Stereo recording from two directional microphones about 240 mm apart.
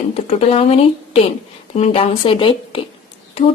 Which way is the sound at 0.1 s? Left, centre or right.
Left.